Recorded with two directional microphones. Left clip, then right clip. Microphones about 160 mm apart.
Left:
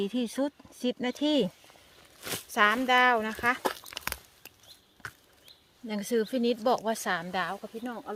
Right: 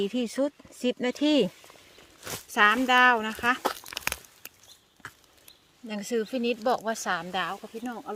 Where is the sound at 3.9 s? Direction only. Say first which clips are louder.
Right 4 dB; 40° right (ahead or behind).